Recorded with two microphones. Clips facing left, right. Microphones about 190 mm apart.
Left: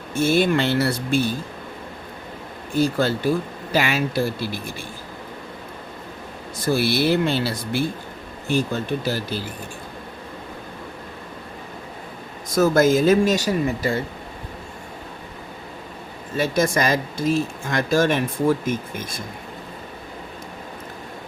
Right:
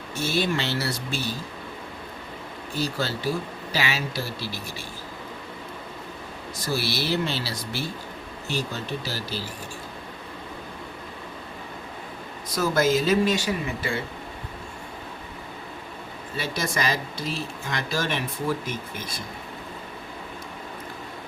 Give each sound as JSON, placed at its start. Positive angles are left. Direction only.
{"t": 0.1, "sound": "speech", "side_deg": 50}
{"t": 2.7, "sound": "speech", "side_deg": 50}
{"t": 6.6, "sound": "speech", "side_deg": 55}
{"t": 12.5, "sound": "speech", "side_deg": 50}
{"t": 16.3, "sound": "speech", "side_deg": 45}